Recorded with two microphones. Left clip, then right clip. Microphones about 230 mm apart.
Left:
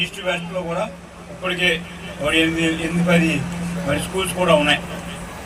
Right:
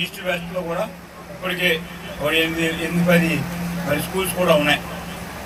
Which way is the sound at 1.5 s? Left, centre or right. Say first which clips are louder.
Left 1 dB; centre.